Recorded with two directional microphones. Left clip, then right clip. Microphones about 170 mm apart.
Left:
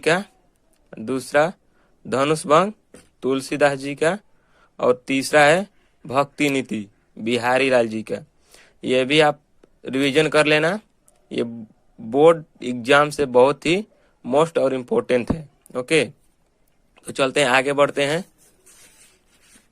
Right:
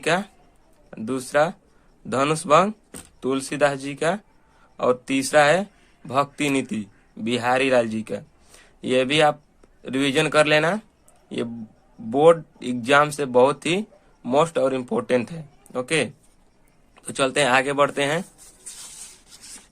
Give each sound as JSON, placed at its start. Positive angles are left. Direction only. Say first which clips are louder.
{"t": 0.0, "sound": "speech", "louder": "left 3 dB", "side_deg": 35}
{"t": 12.1, "sound": "speech", "louder": "left 1 dB", "side_deg": 35}